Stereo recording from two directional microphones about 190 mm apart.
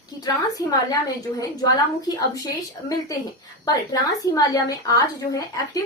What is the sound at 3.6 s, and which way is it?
A woman's voice, 20° left (ahead or behind).